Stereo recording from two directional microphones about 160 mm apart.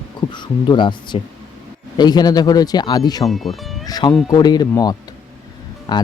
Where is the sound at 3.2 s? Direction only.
Centre (ahead or behind).